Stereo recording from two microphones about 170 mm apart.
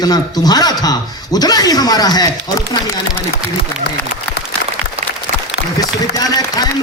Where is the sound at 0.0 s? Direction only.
25° left (ahead or behind).